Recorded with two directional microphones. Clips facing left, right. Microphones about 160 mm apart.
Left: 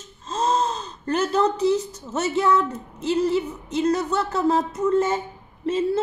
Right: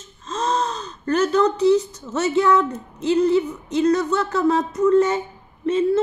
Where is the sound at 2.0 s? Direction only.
25° left (ahead or behind).